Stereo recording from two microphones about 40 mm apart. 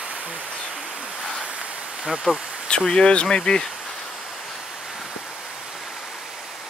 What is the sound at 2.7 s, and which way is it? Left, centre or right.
Speech, left.